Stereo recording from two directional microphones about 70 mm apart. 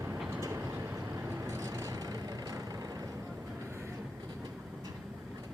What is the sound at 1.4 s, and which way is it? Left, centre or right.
Vehicle, right.